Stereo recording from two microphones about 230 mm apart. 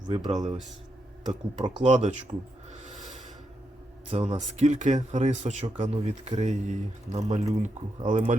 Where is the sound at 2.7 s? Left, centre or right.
Right.